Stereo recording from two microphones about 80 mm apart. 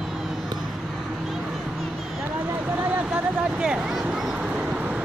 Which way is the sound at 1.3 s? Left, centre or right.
Centre.